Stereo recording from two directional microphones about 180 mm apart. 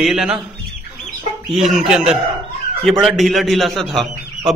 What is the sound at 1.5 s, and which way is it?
A man's voice, 5° right (ahead or behind).